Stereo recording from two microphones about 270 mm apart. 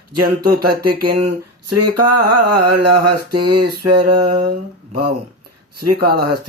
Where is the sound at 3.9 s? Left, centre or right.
Centre.